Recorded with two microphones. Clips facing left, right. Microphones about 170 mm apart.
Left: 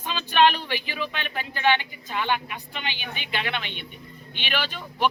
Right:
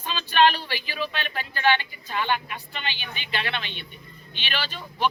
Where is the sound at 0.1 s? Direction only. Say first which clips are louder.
Even; 15° left (ahead or behind).